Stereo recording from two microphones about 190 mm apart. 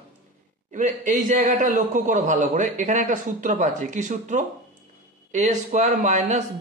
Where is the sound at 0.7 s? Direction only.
40° right (ahead or behind).